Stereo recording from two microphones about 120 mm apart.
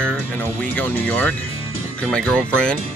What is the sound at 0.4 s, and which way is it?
Speech, 15° left (ahead or behind).